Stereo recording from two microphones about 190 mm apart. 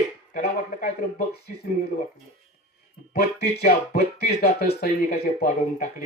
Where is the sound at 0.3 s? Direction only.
55° left (ahead or behind).